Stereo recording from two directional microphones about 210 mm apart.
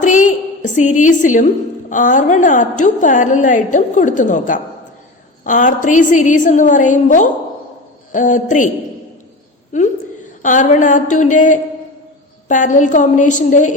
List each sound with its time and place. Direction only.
0.0 s a sound: 35° left (ahead or behind)
1.9 s a woman's voice: 40° left (ahead or behind)
9.7 s a woman's voice: 35° left (ahead or behind)